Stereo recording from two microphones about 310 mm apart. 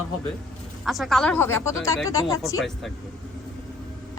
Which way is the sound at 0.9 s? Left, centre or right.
Centre.